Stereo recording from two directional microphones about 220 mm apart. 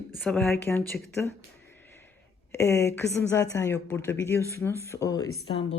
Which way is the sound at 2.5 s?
10° left (ahead or behind).